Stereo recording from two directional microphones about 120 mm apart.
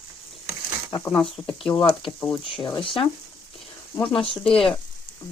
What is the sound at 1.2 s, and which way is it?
Speech, 5° left (ahead or behind).